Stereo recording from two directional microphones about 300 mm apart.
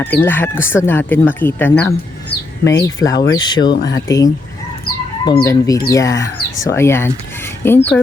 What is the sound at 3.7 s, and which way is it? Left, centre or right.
Speech, left.